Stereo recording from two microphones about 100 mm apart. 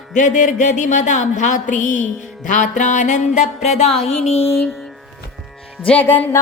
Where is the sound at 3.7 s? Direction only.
90° left.